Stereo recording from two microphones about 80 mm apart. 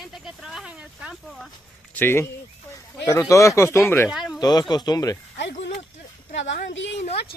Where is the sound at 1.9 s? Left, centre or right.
Left.